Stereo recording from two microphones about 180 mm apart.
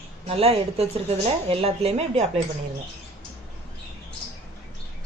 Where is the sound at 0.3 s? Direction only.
35° right (ahead or behind).